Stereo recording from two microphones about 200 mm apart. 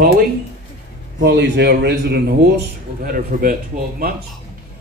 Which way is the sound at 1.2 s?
60° right (ahead or behind).